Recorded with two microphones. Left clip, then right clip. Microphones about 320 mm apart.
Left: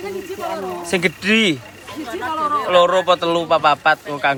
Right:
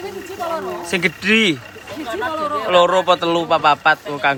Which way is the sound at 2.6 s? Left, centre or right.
Centre.